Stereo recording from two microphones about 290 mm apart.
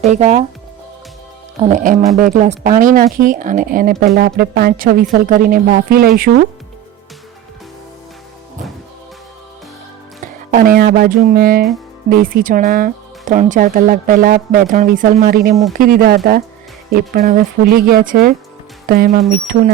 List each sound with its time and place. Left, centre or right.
0.0 s speech: right
1.6 s speech: right
10.5 s speech: right